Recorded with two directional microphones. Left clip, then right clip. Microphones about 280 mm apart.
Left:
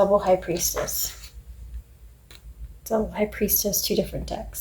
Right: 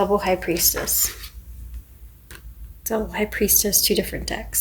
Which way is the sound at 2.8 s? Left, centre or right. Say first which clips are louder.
Even; right.